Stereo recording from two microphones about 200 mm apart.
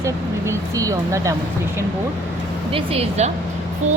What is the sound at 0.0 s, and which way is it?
Speech, 15° right (ahead or behind).